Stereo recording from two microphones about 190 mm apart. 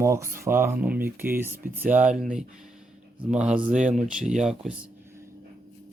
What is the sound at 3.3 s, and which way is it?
Speech, 5° right (ahead or behind).